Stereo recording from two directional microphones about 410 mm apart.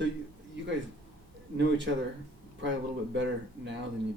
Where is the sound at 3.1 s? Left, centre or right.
Right.